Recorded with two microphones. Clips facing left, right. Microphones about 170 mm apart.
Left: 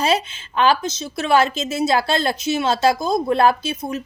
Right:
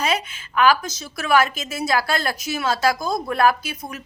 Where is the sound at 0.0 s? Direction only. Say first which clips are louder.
Left 4 dB; 30° left (ahead or behind).